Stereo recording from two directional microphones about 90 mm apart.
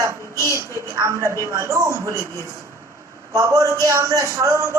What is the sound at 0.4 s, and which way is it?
A man's voice, 35° right (ahead or behind).